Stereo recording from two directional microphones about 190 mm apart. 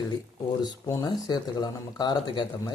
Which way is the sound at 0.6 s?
20° left (ahead or behind).